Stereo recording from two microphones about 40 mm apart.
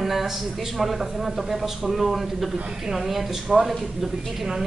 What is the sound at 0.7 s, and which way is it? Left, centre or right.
Speech, centre.